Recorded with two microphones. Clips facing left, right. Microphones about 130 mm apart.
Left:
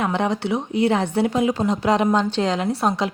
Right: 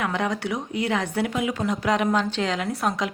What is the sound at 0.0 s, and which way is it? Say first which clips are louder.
A woman's voice: left 4 dB; 25° left (ahead or behind).